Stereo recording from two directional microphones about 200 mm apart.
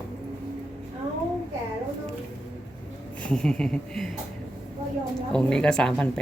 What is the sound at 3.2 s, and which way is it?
Speech, 5° left (ahead or behind).